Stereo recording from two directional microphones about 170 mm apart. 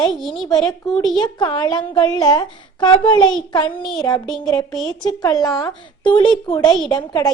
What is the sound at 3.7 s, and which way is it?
Speech, 5° left (ahead or behind).